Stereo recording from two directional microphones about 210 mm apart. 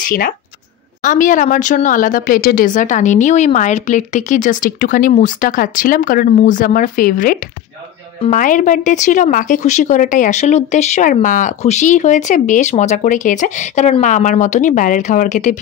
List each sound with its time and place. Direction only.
1.0 s speech: 40° left (ahead or behind)